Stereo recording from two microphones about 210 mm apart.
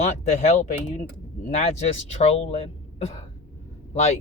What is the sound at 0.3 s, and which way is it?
Speech, 30° left (ahead or behind).